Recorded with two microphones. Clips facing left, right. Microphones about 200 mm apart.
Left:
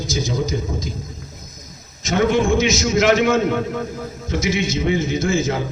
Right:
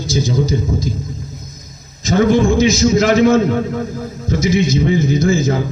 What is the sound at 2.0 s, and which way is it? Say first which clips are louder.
A man's voice: right 5 dB; 35° right (ahead or behind).